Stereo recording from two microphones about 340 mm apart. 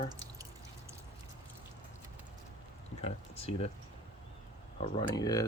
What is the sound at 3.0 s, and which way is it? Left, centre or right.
Speech, centre.